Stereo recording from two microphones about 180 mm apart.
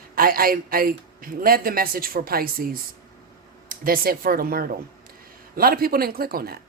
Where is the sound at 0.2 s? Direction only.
55° right (ahead or behind).